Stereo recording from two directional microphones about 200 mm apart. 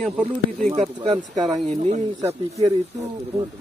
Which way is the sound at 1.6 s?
35° right (ahead or behind).